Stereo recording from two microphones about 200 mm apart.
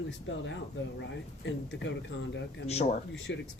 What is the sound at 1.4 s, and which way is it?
Speech, 65° left (ahead or behind).